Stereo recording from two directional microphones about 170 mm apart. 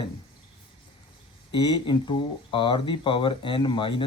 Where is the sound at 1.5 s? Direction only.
25° left (ahead or behind).